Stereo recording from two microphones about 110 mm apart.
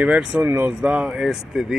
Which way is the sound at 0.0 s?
10° right (ahead or behind).